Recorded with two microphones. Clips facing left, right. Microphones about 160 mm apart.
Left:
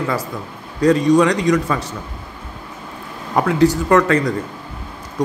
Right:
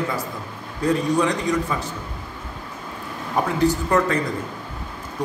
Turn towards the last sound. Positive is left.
turn(degrees=90)